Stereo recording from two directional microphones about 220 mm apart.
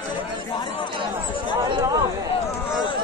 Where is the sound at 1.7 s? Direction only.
20° right (ahead or behind).